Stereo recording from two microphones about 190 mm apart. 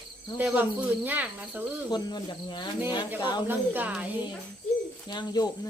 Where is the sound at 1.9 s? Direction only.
20° left (ahead or behind).